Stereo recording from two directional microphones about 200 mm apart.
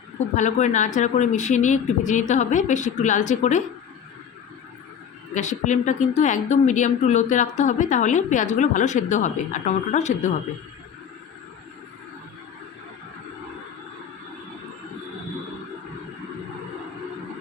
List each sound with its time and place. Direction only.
0.3 s a woman's voice: 35° left (ahead or behind)
5.3 s a woman's voice: 35° left (ahead or behind)